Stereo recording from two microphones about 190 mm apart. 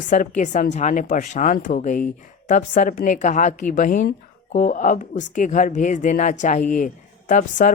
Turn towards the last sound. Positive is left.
turn(degrees=40)  # may be behind; listen again after turning